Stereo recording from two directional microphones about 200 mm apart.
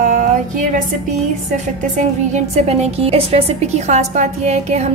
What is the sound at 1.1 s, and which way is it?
Speech, 35° right (ahead or behind).